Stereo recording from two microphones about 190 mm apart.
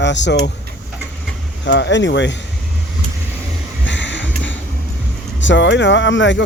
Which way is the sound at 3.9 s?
75° left (ahead or behind).